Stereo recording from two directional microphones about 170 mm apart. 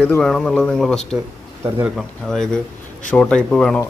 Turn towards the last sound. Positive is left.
turn(degrees=5)  # may be behind; listen again after turning